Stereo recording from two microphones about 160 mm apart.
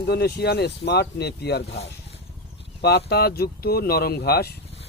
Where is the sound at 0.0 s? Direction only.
85° left.